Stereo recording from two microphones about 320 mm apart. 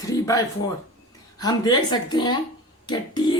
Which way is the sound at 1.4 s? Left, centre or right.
Centre.